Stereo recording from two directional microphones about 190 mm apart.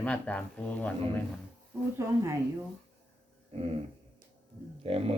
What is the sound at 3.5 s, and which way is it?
Dog, 30° right (ahead or behind).